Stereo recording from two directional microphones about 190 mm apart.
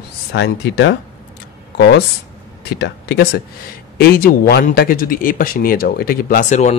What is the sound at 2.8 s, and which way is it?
Speech, 60° left (ahead or behind).